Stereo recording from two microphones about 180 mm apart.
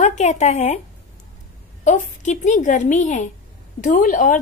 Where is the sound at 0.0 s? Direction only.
40° left (ahead or behind).